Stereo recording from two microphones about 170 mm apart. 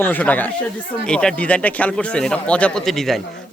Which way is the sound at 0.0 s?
10° left (ahead or behind).